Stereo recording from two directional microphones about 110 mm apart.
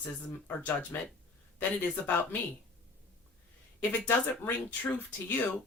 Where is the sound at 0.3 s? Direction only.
15° left (ahead or behind).